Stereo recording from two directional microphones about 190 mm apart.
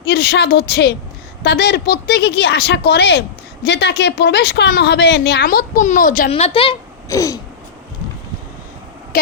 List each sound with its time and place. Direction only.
0.1 s speech: 55° left (ahead or behind)
6.3 s speech: 30° left (ahead or behind)